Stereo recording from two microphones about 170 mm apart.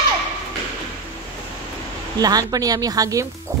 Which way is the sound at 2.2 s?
20° right (ahead or behind).